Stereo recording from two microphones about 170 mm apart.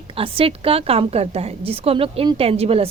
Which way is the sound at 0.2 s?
35° right (ahead or behind).